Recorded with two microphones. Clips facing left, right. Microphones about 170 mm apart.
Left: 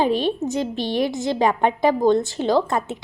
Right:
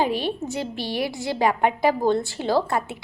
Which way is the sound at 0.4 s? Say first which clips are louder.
Left 5 dB; 20° left (ahead or behind).